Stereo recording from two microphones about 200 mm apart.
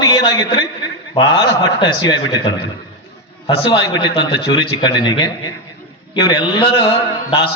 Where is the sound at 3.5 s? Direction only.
20° left (ahead or behind).